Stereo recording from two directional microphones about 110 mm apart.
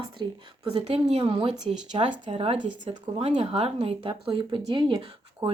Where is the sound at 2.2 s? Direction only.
60° right (ahead or behind); by 5.0 s 45° right (ahead or behind).